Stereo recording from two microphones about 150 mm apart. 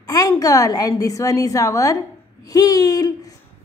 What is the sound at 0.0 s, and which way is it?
A woman's voice, 25° left (ahead or behind).